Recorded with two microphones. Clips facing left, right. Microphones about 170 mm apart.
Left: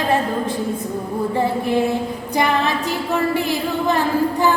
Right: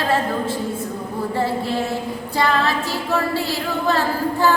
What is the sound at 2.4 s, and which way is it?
Music, 20° left (ahead or behind).